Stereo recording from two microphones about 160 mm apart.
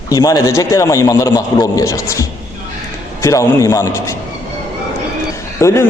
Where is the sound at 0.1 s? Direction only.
20° left (ahead or behind).